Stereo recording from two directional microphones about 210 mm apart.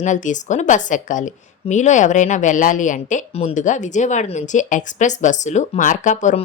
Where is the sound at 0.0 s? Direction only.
35° left (ahead or behind).